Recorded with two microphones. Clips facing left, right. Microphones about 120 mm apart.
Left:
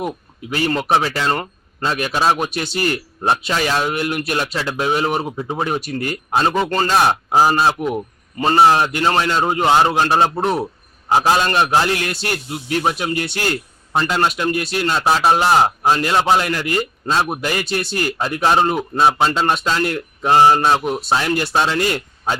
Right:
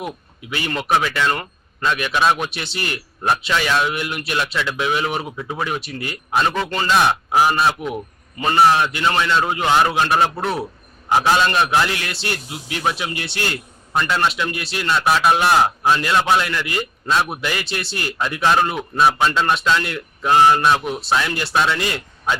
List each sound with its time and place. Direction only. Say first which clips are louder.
0.5 s speech: left 3 dB; 40° left (ahead or behind)
11.9 s speech: left 4 dB; 45° left (ahead or behind)
13.9 s speech: left 2 dB; 30° left (ahead or behind)
14.3 s speech: left 3 dB; 45° left (ahead or behind)
14.9 s a man's voice: left 1 dB; 30° left (ahead or behind)
15.9 s speech: left 1 dB; 40° left (ahead or behind)
16.1 s a man's voice: left 2 dB; 30° left (ahead or behind)
21.8 s speech: left 5 dB; 40° left (ahead or behind)